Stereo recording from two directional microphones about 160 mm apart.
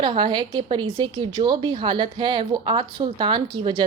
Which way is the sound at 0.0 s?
30° right (ahead or behind).